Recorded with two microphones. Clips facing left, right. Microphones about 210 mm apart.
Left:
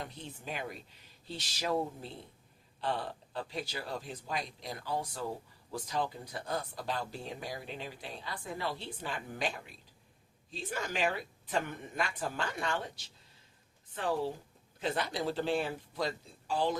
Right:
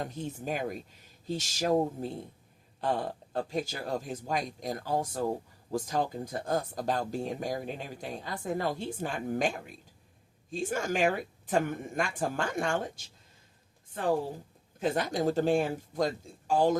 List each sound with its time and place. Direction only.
0.0 s a woman's voice: 45° right (ahead or behind)